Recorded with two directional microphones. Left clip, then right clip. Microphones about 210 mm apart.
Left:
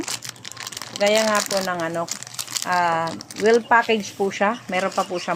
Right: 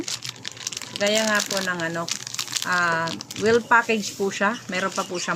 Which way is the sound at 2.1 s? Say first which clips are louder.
Right 3 dB; 10° left (ahead or behind).